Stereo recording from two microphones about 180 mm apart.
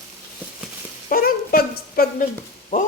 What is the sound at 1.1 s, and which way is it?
Speech, 55° left (ahead or behind).